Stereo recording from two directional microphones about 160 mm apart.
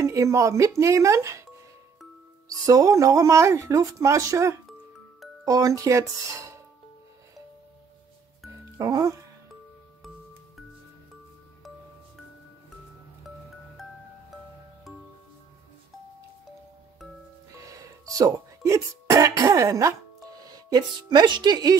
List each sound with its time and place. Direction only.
0.0 s speech: 20° right (ahead or behind)
2.6 s speech: 20° right (ahead or behind)
8.7 s speech: 20° right (ahead or behind)
17.6 s a woman's voice: 20° right (ahead or behind)